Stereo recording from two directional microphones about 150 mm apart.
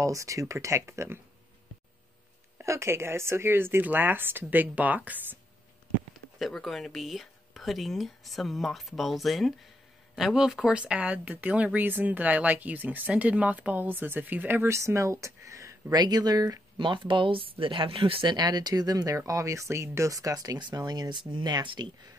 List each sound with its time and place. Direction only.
0.0 s speech: 20° right (ahead or behind)
2.6 s speech: 20° right (ahead or behind)
6.4 s speech: centre (ahead or behind); by 21.9 s 30° right (ahead or behind)